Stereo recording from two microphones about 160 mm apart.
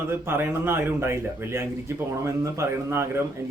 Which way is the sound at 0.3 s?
15° right (ahead or behind).